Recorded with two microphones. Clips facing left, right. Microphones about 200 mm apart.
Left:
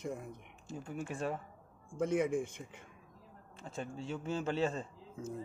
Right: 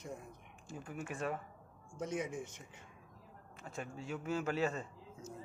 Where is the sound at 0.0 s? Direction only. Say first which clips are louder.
Left 6 dB; 60° left (ahead or behind).